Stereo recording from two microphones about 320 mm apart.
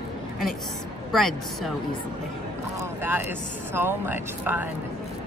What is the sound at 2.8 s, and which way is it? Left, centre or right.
Speech, centre.